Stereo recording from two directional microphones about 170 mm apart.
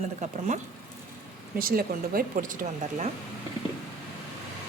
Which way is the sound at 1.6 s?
60° right (ahead or behind).